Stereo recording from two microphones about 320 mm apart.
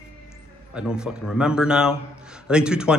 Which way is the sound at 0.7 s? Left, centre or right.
Centre.